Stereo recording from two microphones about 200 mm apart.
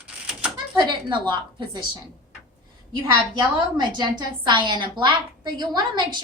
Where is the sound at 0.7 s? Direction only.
20° right (ahead or behind).